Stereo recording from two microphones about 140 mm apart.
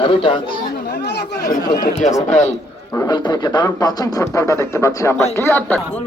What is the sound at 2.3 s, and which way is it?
Speech, 55° left (ahead or behind).